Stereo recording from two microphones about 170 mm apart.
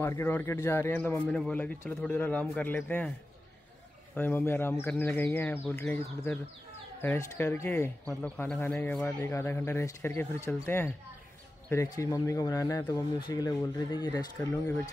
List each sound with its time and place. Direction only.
0.0 s a man's voice: 15° left (ahead or behind)
4.1 s a man's voice: 10° left (ahead or behind); by 14.5 s 25° left (ahead or behind)